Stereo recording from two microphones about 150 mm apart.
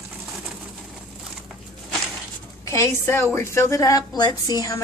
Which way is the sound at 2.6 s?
20° left (ahead or behind).